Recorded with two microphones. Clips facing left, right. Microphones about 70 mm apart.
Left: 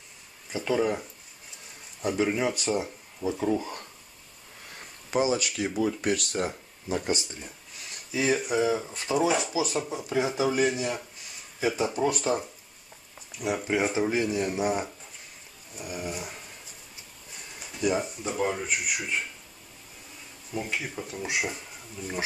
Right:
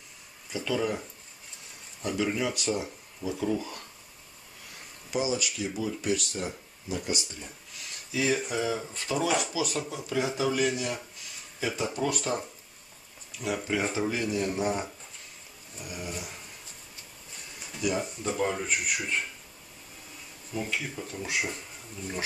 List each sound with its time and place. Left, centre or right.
0.5 s speech: left
2.0 s speech: left
5.1 s speech: left
8.1 s speech: left
13.4 s speech: centre
13.9 s speech: left
17.8 s speech: centre
20.5 s speech: centre